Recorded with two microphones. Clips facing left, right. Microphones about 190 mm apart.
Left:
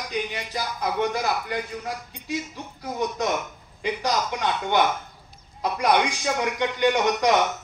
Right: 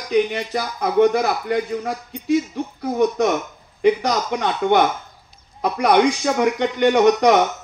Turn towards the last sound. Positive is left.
turn(degrees=-55)  # may be behind; listen again after turning